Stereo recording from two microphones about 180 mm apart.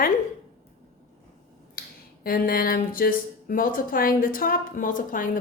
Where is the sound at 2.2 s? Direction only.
55° left (ahead or behind).